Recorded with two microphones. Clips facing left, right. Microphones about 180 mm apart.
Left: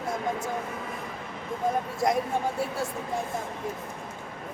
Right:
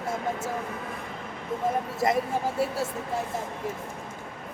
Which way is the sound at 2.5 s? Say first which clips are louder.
Right 2 dB; 25° right (ahead or behind).